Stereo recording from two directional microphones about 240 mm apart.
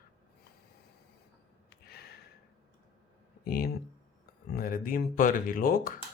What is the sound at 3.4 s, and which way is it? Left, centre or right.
Speech, left.